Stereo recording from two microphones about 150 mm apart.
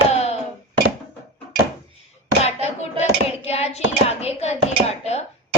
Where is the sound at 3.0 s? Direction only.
45° left (ahead or behind).